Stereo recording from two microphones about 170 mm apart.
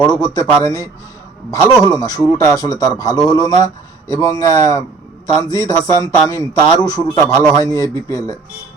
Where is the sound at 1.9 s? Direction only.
20° left (ahead or behind).